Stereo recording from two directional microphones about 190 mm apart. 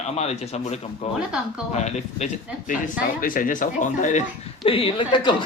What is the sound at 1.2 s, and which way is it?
Speech, 5° right (ahead or behind).